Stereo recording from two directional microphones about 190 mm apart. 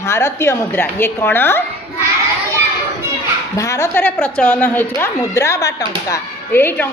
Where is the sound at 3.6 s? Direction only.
15° left (ahead or behind).